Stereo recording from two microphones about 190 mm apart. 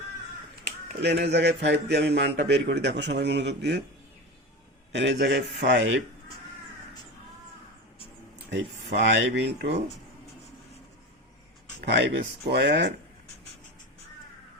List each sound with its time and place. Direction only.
1.0 s a man's voice: 60° right (ahead or behind)
4.9 s a man's voice: 65° right (ahead or behind)
8.4 s a man's voice: 70° right (ahead or behind)
11.8 s a man's voice: 60° right (ahead or behind)